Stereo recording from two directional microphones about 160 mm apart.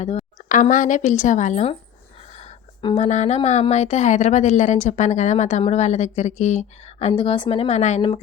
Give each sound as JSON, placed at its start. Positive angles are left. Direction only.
{"t": 0.0, "sound": "speech", "side_deg": 45}
{"t": 2.3, "sound": "a sound", "side_deg": 45}
{"t": 2.8, "sound": "a woman's voice", "side_deg": 35}
{"t": 7.1, "sound": "a woman's voice", "side_deg": 35}